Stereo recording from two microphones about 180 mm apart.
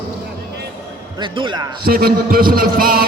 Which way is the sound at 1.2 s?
25° right (ahead or behind).